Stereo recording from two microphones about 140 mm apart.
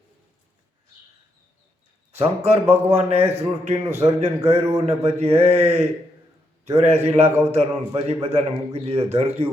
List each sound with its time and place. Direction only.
2.1 s a man's voice: 50° right (ahead or behind)